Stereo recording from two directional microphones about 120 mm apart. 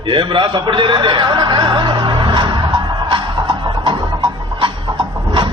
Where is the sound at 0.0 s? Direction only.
45° right (ahead or behind).